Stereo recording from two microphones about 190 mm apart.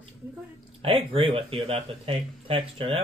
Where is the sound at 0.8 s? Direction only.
30° right (ahead or behind).